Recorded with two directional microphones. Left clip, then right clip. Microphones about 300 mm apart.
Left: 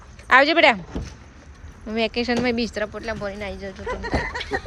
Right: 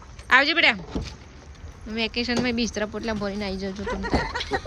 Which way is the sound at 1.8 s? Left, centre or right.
Centre.